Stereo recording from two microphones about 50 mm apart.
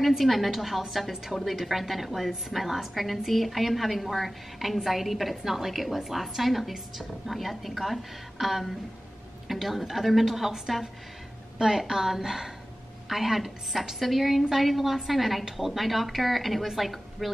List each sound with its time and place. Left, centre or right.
0.0 s a woman's voice: centre